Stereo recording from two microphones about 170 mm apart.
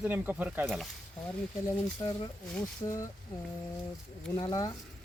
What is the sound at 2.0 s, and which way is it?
Speech, 30° left (ahead or behind).